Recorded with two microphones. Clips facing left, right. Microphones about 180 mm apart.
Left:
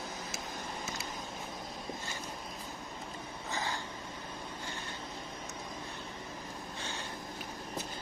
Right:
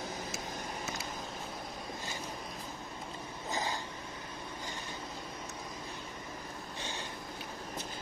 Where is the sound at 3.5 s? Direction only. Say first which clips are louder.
Right 1 dB; 15° right (ahead or behind).